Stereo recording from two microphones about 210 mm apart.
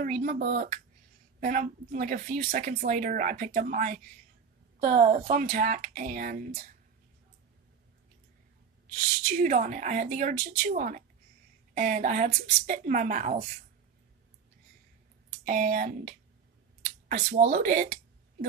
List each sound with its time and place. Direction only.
0.0 s a woman's voice: 40° right (ahead or behind)
9.4 s speech: 40° right (ahead or behind)
15.4 s speech: 40° right (ahead or behind)